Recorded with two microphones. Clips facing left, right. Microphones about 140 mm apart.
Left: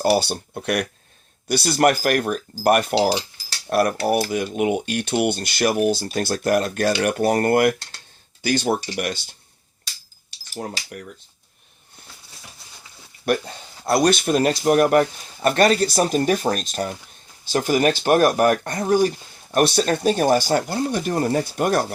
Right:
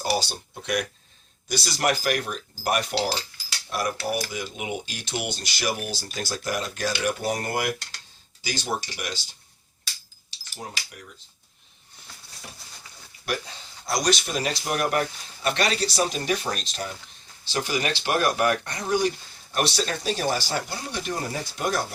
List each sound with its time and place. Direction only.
0.2 s speech: 60° left (ahead or behind)
10.3 s cutlery: 55° left (ahead or behind)
13.2 s speech: 55° left (ahead or behind)